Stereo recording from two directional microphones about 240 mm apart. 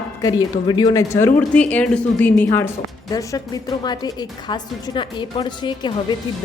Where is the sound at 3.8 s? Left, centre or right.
Centre.